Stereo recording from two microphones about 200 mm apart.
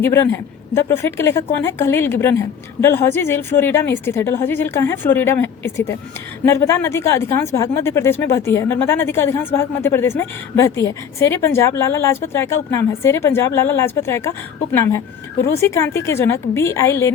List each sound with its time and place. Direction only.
0.7 s speech: 10° left (ahead or behind)